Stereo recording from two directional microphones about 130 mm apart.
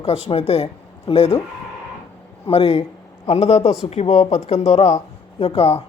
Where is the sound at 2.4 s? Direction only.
50° left (ahead or behind).